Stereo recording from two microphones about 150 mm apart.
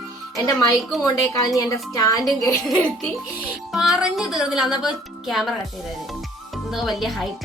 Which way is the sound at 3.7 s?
Centre (ahead or behind).